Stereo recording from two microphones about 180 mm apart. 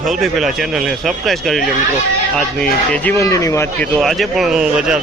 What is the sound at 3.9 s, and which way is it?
Speech, centre (ahead or behind).